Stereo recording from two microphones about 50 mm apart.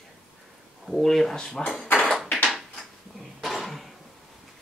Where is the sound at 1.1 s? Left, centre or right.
Centre.